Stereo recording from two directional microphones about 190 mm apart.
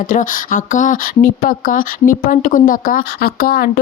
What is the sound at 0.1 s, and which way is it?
Speech, 45° left (ahead or behind).